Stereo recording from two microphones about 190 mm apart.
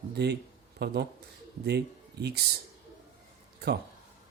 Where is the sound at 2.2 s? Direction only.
60° right (ahead or behind).